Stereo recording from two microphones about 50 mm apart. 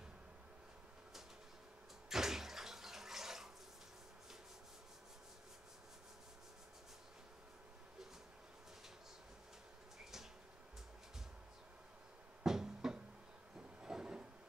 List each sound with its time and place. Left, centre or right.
2.0 s a sound: centre
12.4 s music: centre
13.6 s train: centre